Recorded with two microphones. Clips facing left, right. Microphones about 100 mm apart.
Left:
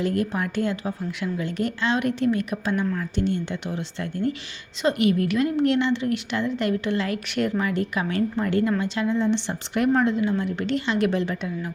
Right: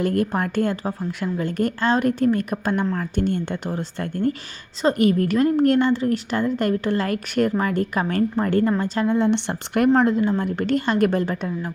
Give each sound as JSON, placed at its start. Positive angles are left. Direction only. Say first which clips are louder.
{"t": 0.0, "sound": "a woman's voice", "louder": "right 3 dB", "side_deg": -50}
{"t": 9.1, "sound": "speech", "louder": "right 3 dB", "side_deg": -60}
{"t": 10.0, "sound": "a woman's voice", "louder": "right 3 dB", "side_deg": -45}